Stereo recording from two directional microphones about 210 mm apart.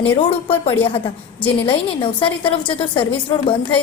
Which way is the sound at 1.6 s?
25° left (ahead or behind).